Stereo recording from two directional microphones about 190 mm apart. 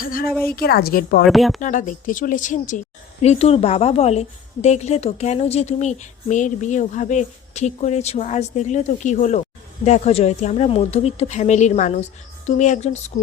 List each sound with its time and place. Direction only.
0.0 s a sound: 45° left (ahead or behind)
0.4 s a woman's voice: 50° left (ahead or behind)
1.2 s speech: centre (ahead or behind)
1.6 s a woman's voice: 40° left (ahead or behind)